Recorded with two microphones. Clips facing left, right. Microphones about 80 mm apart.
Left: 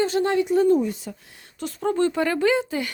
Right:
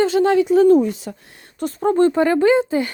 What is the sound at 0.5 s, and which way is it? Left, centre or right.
Speech, right.